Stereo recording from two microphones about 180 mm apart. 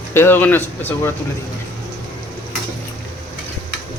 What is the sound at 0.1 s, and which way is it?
Speech, 15° left (ahead or behind).